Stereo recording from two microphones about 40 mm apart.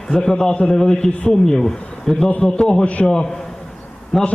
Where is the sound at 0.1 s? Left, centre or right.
Centre.